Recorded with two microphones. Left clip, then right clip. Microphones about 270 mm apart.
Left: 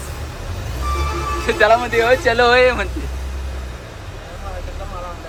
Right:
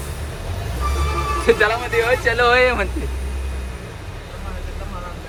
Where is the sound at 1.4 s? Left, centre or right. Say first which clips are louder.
Left 3 dB; centre.